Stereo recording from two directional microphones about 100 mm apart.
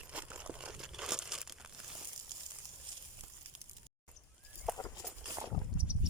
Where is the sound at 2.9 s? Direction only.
50° right (ahead or behind).